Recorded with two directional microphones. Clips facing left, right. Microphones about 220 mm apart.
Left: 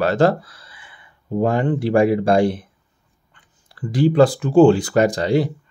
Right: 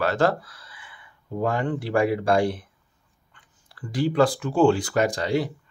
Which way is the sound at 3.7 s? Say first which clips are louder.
Left 7 dB; 25° left (ahead or behind).